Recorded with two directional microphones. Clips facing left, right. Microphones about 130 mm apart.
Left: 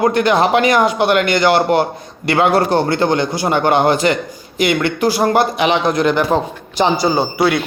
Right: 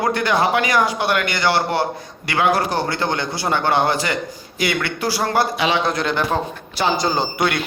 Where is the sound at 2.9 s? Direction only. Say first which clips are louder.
Left 7 dB; 50° left (ahead or behind).